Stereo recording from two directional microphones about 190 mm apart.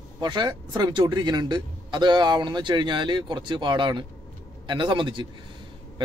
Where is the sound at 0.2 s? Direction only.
20° right (ahead or behind).